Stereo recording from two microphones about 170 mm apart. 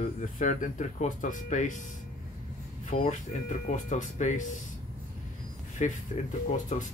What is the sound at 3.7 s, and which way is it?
Speech, 45° left (ahead or behind).